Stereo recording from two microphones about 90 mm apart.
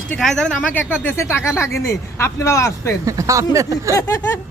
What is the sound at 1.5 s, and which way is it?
Speech, 30° left (ahead or behind).